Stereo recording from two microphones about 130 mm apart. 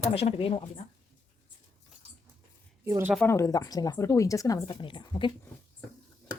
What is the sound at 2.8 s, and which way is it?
Speech, 20° right (ahead or behind).